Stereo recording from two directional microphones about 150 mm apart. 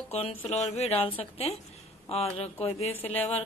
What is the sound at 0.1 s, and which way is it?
A woman's voice, 40° left (ahead or behind).